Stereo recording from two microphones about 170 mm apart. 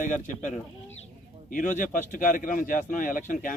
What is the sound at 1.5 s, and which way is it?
Speech, 50° left (ahead or behind).